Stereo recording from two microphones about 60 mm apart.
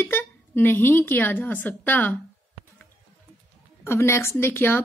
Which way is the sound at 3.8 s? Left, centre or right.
Left.